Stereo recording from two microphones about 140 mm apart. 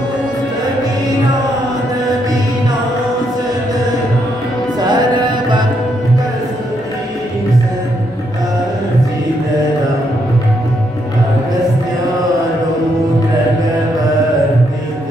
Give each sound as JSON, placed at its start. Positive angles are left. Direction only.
{"t": 4.7, "sound": "music", "side_deg": -30}